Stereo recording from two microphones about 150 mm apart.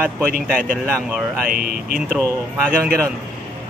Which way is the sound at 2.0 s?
5° left (ahead or behind).